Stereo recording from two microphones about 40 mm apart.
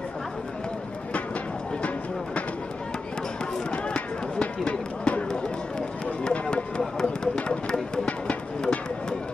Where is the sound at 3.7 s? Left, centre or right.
Left.